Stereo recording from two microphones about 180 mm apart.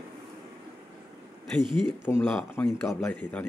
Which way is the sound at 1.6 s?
25° right (ahead or behind).